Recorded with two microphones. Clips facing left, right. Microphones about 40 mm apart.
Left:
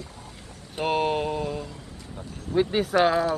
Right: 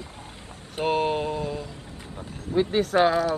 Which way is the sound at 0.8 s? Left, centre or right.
Centre.